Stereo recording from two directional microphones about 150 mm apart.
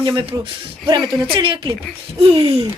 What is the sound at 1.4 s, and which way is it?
Speech, 35° right (ahead or behind).